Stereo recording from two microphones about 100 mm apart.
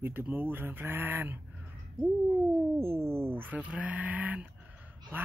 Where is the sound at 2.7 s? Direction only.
25° right (ahead or behind).